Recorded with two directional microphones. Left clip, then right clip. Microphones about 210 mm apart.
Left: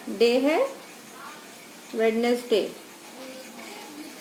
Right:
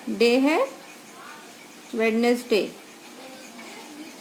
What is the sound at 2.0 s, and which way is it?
Speech, 50° right (ahead or behind).